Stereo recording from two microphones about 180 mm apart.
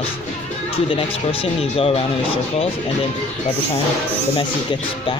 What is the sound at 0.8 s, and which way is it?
Speech, 30° left (ahead or behind).